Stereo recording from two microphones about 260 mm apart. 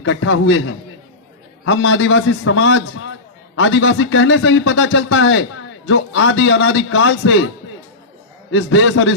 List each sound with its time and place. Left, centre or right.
0.0 s a man's voice: left
1.6 s a man's voice: left
8.5 s a man's voice: left